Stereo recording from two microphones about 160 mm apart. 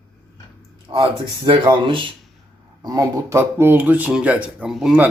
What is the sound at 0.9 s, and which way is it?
Speech, 30° right (ahead or behind).